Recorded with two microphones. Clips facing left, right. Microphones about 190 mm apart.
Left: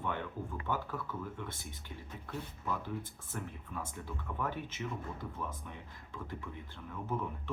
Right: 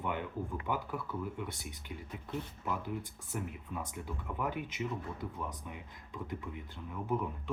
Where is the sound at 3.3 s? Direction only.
15° right (ahead or behind).